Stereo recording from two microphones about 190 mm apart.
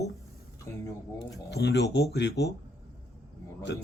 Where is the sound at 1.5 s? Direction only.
60° left (ahead or behind).